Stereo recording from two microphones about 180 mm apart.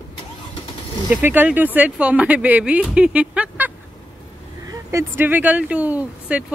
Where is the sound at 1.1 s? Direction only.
10° right (ahead or behind).